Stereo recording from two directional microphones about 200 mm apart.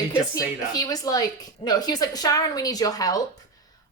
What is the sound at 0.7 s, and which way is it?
A woman's voice, 20° left (ahead or behind).